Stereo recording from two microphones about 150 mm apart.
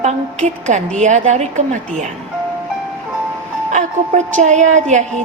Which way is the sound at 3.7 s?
55° right (ahead or behind).